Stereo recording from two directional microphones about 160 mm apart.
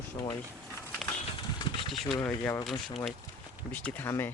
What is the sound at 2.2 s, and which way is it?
Speech, 10° left (ahead or behind).